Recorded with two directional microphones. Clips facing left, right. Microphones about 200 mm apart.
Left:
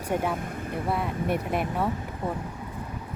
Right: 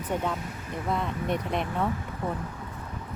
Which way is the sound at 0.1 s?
10° left (ahead or behind).